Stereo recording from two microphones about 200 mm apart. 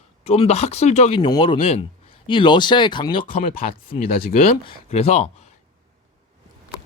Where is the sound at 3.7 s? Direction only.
45° left (ahead or behind).